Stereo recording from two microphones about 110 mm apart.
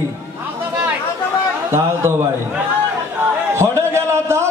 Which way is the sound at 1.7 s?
25° right (ahead or behind).